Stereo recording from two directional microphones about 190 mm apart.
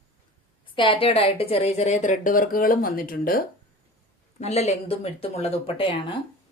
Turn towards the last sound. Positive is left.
turn(degrees=25)  # may be behind; listen again after turning